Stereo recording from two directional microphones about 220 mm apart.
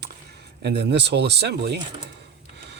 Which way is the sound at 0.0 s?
50° right (ahead or behind).